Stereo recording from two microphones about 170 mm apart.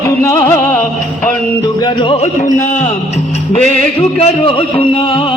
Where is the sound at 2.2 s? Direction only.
45° left (ahead or behind).